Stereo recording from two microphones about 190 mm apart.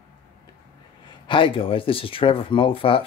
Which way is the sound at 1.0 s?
25° left (ahead or behind).